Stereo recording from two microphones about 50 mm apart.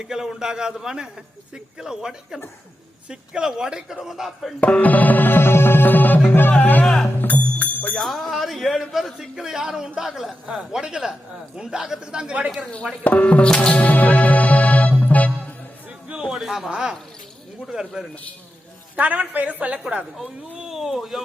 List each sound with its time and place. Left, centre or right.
0.0 s a man's voice: centre
4.6 s music: left
6.8 s music: centre
7.2 s music: left
7.9 s a sound: centre
9.1 s a man's voice: centre
13.1 s speech: left
13.7 s music: left
16.2 s a man's voice: centre
18.9 s a woman's voice: right
20.6 s a sound: centre